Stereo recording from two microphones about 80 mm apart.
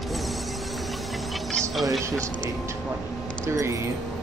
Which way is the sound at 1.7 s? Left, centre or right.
Centre.